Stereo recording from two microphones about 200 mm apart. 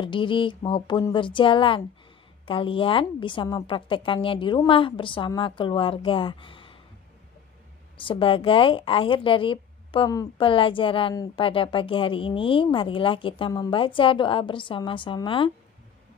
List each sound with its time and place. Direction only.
0.0 s a woman's voice: 25° left (ahead or behind)
8.0 s a woman's voice: 25° left (ahead or behind)